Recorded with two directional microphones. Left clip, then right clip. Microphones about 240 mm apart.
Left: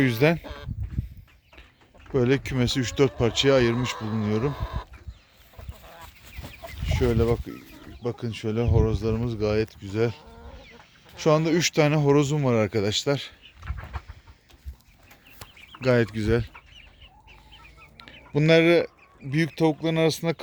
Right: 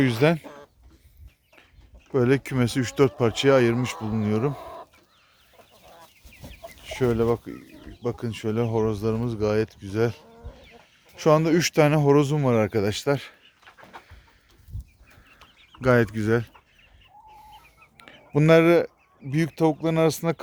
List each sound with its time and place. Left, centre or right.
0.0 s speech: centre
0.4 s a sound: centre
2.1 s speech: centre
4.5 s speech: left
6.8 s speech: centre
15.8 s speech: centre
17.9 s a sound: centre
19.3 s speech: centre